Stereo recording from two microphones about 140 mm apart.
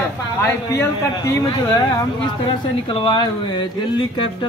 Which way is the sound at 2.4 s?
35° left (ahead or behind).